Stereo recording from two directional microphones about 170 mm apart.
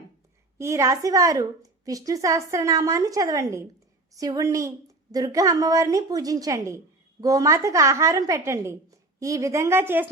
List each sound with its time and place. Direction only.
0.6 s a woman's voice: 15° right (ahead or behind)